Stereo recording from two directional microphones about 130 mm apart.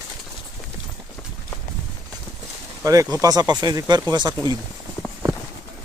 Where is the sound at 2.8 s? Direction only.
25° right (ahead or behind).